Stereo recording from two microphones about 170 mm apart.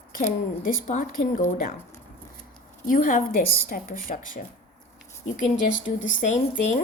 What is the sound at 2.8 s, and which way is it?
Speech, 50° left (ahead or behind).